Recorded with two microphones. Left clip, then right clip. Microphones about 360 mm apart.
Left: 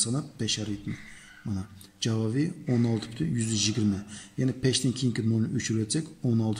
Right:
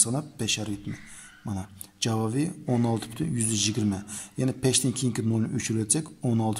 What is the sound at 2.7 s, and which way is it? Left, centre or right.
Speech, right.